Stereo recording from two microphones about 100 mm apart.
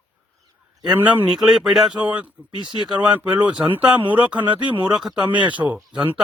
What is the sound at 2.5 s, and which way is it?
Speech, 45° right (ahead or behind).